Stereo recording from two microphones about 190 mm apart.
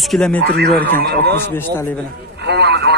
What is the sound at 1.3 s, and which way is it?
Speech, 10° left (ahead or behind).